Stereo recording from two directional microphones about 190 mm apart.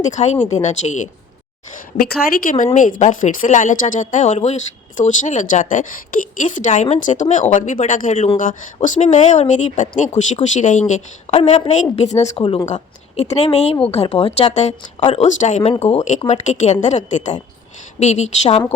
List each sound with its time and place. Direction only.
0.0 s a woman's voice: 40° left (ahead or behind)
2.3 s a woman's voice: 45° left (ahead or behind)